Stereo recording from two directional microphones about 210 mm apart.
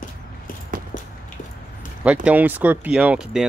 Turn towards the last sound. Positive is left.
turn(degrees=-5)  # may be behind; listen again after turning